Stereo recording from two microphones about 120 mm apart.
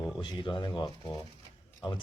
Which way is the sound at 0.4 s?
45° left (ahead or behind).